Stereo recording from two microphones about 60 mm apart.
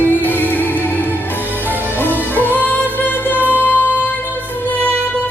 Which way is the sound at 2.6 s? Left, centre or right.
Left.